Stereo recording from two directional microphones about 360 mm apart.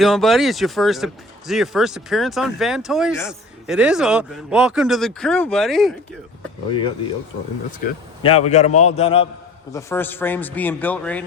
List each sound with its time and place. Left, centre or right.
0.0 s speech: centre
7.9 s a man's voice: centre
9.7 s speech: centre